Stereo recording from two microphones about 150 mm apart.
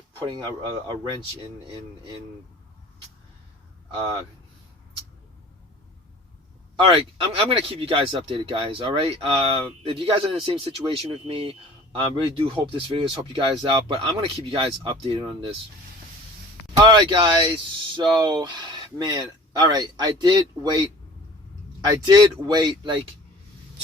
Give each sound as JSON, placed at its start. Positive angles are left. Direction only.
{"t": 0.3, "sound": "speech", "side_deg": -30}
{"t": 6.7, "sound": "speech", "side_deg": -35}
{"t": 16.7, "sound": "speech", "side_deg": -30}